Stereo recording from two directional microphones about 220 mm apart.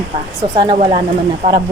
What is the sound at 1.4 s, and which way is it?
Speech, 30° right (ahead or behind).